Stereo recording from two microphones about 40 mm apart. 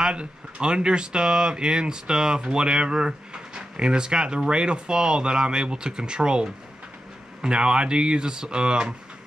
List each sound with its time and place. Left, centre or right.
0.0 s speech: right